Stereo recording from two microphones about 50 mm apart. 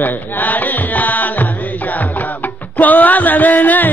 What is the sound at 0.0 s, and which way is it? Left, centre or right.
Carnatic music, left.